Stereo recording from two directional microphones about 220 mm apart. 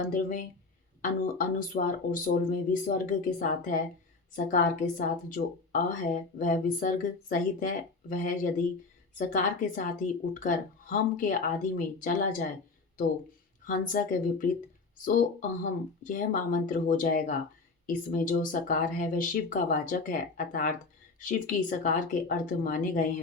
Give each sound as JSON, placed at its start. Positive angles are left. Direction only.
{"t": 0.0, "sound": "a woman's voice", "side_deg": 35}
{"t": 13.7, "sound": "a woman's voice", "side_deg": 35}